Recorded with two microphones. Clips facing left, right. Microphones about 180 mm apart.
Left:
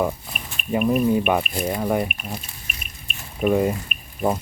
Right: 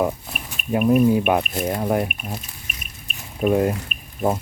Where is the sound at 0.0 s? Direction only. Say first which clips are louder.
Right 1 dB; 5° right (ahead or behind).